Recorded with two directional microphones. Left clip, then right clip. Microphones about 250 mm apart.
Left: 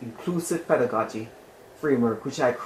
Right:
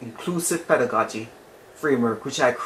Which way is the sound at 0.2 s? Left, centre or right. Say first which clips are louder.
Right 2 dB; centre.